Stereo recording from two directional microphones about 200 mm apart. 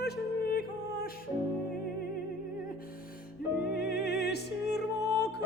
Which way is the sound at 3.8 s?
55° left (ahead or behind).